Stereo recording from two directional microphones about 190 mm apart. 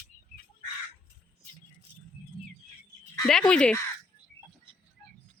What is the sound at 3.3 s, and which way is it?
Speech, 5° left (ahead or behind).